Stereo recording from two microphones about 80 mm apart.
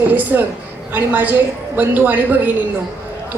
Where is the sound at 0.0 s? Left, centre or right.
Right.